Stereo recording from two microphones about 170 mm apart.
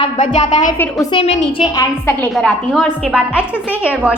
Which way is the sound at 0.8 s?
5° left (ahead or behind).